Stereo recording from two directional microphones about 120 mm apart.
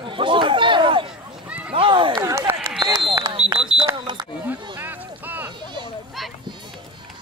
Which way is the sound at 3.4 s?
5° right (ahead or behind).